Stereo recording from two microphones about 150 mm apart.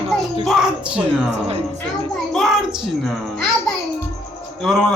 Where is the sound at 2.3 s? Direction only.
Centre (ahead or behind).